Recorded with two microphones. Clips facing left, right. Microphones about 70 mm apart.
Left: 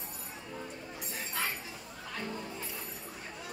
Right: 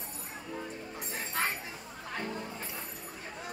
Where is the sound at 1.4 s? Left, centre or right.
Right.